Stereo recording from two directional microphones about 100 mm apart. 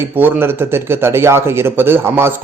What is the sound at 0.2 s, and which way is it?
A man's voice, 25° right (ahead or behind).